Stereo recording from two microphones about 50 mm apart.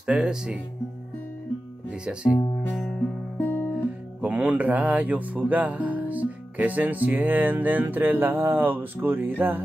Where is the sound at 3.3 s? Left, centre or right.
Left.